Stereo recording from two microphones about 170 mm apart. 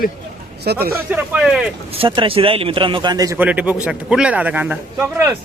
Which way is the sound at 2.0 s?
30° right (ahead or behind).